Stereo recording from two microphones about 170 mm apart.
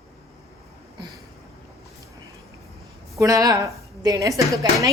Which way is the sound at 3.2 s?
20° right (ahead or behind).